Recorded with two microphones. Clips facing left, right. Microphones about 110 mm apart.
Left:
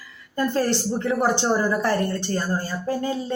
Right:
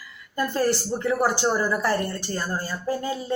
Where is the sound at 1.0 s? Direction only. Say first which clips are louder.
Even; 20° left (ahead or behind).